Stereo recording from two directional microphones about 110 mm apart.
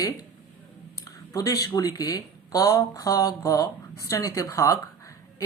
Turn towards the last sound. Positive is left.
turn(degrees=30)  # may be behind; listen again after turning